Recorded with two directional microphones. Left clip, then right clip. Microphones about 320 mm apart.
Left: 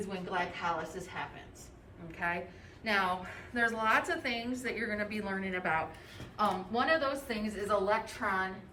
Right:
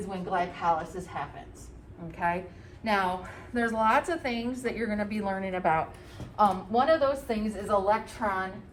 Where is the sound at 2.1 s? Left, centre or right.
Centre.